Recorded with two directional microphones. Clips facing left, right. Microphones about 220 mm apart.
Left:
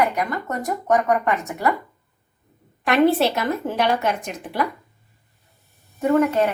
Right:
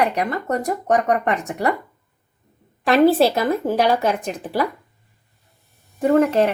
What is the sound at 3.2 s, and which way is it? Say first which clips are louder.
A woman's voice: right 4 dB; 35° right (ahead or behind).